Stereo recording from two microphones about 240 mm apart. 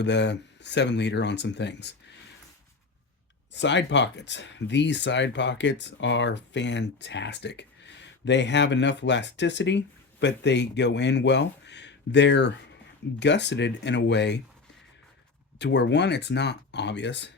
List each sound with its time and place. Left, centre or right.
0.0 s speech: left
3.5 s speech: left
15.5 s speech: left